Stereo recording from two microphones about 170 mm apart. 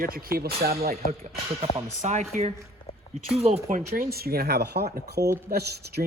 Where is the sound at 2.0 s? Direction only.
45° right (ahead or behind).